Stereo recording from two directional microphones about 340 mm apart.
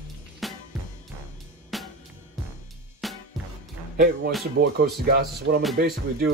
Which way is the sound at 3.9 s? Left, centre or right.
Right.